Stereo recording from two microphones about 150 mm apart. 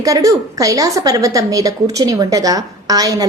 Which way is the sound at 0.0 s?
25° right (ahead or behind).